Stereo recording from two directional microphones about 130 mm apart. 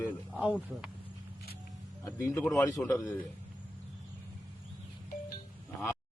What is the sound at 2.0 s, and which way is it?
Speech, 20° left (ahead or behind).